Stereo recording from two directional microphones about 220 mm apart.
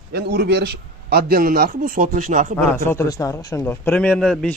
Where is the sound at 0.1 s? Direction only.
50° right (ahead or behind).